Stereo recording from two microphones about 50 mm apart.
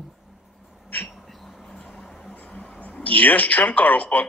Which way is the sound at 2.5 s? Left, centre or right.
Left.